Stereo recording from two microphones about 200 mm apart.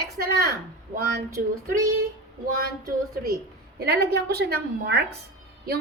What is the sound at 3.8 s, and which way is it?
A woman's voice, 50° right (ahead or behind).